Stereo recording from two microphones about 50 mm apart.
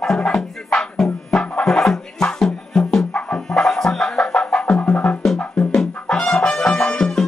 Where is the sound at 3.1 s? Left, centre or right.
Left.